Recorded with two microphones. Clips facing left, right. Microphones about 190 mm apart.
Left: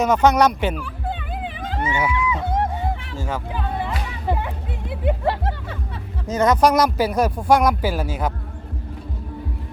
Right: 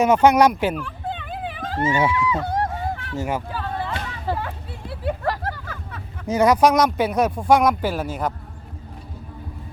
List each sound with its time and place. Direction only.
0.0 s speech: 10° right (ahead or behind)
0.8 s dog: 10° left (ahead or behind)
1.5 s vehicle: 20° left (ahead or behind)
1.8 s speech: 25° right (ahead or behind)
2.1 s a sound: 20° left (ahead or behind)
3.2 s speech: 15° right (ahead or behind)
3.5 s a sound: 15° left (ahead or behind)
6.2 s speech: 10° right (ahead or behind)
6.7 s speech: centre (ahead or behind)